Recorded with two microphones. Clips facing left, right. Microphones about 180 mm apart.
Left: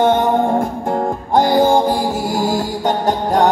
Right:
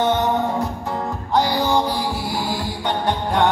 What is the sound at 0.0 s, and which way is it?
Music, 50° left (ahead or behind).